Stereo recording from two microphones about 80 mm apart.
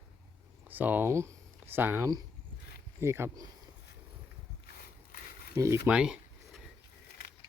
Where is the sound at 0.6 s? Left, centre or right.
Right.